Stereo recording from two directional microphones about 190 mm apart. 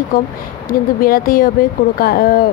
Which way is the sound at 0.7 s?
50° left (ahead or behind).